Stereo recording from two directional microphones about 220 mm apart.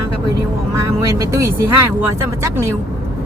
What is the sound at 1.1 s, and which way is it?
Speech, 15° right (ahead or behind).